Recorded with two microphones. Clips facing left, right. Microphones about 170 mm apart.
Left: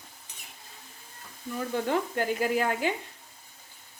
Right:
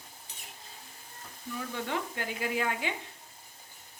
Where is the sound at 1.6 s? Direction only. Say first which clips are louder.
Left 7 dB; 45° left (ahead or behind).